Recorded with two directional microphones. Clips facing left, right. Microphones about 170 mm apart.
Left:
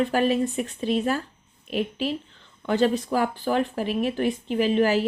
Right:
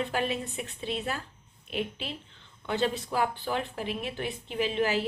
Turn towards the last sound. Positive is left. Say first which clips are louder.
# left 7 dB
turn(degrees=45)  # may be behind; listen again after turning